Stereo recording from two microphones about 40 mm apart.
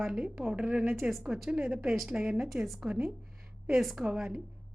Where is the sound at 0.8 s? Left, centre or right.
Right.